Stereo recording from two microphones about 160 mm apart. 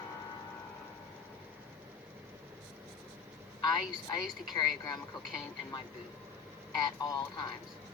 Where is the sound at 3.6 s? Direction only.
25° left (ahead or behind).